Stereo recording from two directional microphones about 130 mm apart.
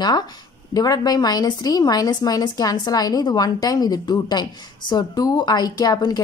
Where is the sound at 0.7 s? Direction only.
30° left (ahead or behind).